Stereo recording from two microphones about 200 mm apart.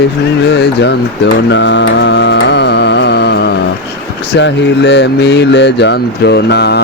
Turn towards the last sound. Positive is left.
turn(degrees=55)  # may be behind; listen again after turning